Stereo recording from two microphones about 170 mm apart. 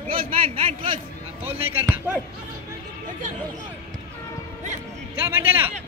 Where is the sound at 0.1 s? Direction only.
30° right (ahead or behind).